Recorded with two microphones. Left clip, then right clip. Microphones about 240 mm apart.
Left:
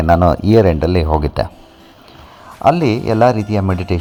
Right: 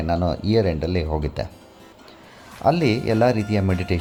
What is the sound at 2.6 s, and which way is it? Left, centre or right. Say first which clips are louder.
Speech: left 6 dB; centre.